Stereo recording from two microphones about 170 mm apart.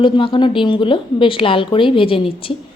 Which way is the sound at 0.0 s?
30° left (ahead or behind).